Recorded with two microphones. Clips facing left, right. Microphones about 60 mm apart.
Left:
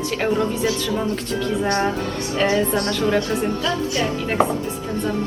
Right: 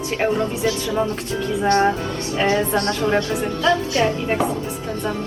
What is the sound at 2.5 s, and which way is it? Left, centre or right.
Speech, right.